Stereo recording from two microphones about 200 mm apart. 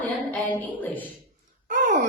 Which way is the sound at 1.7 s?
40° right (ahead or behind).